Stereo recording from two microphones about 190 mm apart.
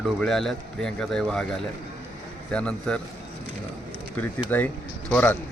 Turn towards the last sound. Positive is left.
turn(degrees=10)  # may be behind; listen again after turning